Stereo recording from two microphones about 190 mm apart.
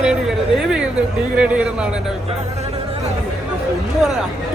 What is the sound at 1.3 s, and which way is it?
Speech, 5° right (ahead or behind).